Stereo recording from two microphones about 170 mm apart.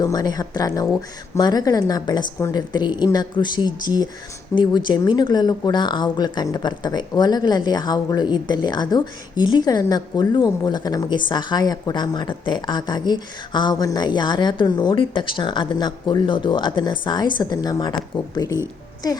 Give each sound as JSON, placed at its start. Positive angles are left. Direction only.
{"t": 0.0, "sound": "a woman's voice", "side_deg": 20}